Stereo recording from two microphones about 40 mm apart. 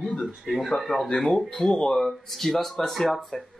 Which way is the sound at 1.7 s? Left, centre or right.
Centre.